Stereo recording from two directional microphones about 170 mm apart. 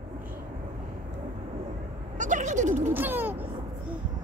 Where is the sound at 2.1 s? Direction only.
45° right (ahead or behind).